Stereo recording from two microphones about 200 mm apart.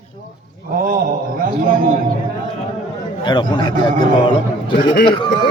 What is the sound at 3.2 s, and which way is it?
Speech, 20° left (ahead or behind).